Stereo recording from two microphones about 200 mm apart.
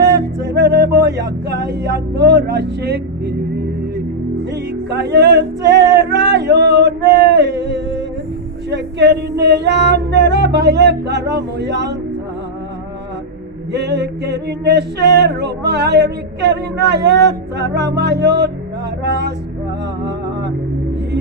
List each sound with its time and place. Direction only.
0.5 s music: 60° right (ahead or behind)
4.8 s male singing: 55° right (ahead or behind)
8.6 s speech: 60° right (ahead or behind)
9.4 s music: 55° right (ahead or behind)
13.7 s music: 60° right (ahead or behind)